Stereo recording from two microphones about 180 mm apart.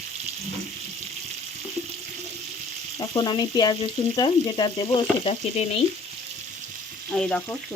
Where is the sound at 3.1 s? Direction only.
25° left (ahead or behind).